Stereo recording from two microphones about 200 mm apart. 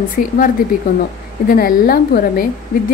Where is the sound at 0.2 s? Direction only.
45° left (ahead or behind).